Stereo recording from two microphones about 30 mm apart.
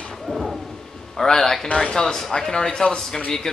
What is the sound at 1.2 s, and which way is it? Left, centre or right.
Speech, centre.